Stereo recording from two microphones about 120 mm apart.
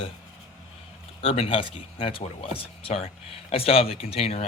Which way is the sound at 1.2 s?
50° left (ahead or behind).